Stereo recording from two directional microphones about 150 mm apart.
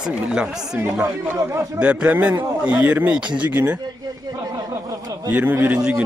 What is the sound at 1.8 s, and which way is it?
A man's voice, 10° right (ahead or behind).